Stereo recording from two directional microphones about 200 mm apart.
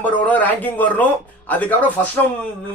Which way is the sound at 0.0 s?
10° left (ahead or behind).